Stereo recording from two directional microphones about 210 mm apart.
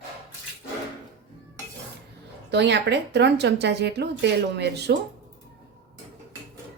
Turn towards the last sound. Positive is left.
turn(degrees=-55)  # may be behind; listen again after turning